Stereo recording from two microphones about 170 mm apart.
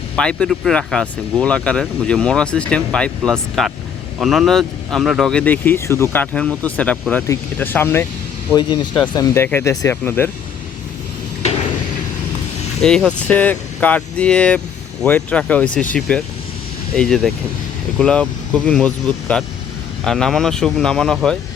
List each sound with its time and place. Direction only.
0.2 s speech: 5° left (ahead or behind)
8.5 s speech: 25° left (ahead or behind)
9.1 s speech: 15° left (ahead or behind)
13.1 s speech: 10° left (ahead or behind)